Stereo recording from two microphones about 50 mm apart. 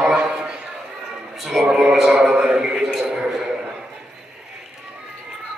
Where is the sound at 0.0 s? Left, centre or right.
Centre.